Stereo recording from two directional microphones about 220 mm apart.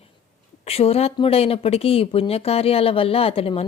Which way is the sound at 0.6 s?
25° left (ahead or behind).